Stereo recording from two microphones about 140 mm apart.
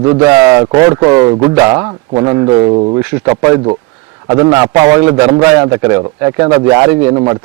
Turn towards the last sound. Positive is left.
turn(degrees=-35)  # may be behind; listen again after turning